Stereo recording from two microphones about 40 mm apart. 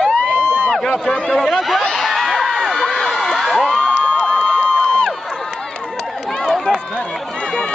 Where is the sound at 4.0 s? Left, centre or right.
Left.